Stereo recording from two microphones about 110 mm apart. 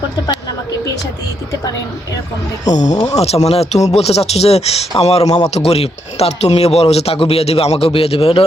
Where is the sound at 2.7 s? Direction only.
90° left.